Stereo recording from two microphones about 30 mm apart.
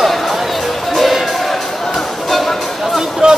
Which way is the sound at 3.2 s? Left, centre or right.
Right.